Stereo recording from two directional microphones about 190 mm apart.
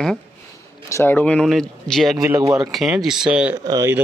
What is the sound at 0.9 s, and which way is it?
Speech, 15° left (ahead or behind).